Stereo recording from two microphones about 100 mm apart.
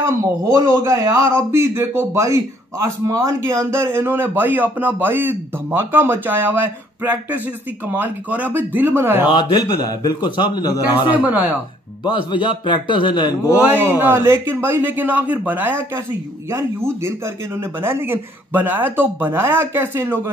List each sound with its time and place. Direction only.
0.0 s speech: 30° right (ahead or behind)
9.3 s a man's voice: 45° left (ahead or behind)
11.1 s speech: 15° right (ahead or behind)
12.0 s a man's voice: 50° left (ahead or behind)
13.6 s speech: 20° right (ahead or behind)